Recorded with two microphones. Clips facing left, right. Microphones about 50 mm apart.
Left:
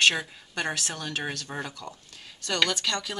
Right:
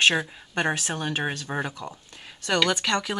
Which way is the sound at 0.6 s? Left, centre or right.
Right.